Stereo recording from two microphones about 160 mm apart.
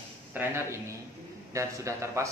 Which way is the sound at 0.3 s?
15° right (ahead or behind).